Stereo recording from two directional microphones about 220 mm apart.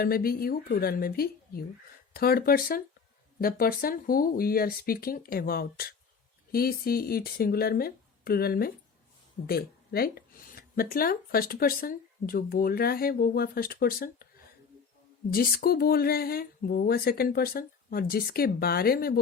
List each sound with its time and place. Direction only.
0.0 s speech: 45° left (ahead or behind)
15.3 s speech: 40° left (ahead or behind)